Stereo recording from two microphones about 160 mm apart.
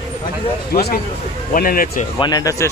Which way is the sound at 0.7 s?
75° left (ahead or behind).